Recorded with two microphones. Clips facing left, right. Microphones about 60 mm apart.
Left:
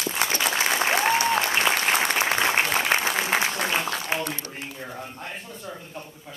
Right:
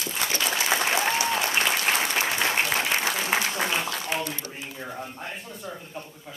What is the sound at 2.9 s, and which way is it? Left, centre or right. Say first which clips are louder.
Applause: left 2 dB; left.